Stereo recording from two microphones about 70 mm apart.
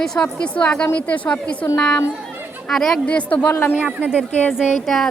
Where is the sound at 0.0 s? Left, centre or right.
Centre.